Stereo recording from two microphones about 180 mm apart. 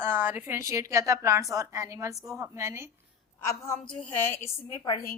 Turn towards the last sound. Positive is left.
turn(degrees=20)  # may be behind; listen again after turning